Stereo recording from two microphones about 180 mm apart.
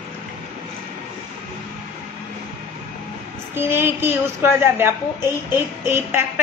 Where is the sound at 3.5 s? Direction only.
10° right (ahead or behind).